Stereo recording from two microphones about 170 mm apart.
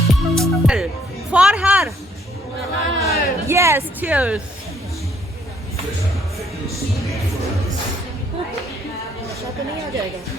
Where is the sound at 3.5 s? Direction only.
15° right (ahead or behind).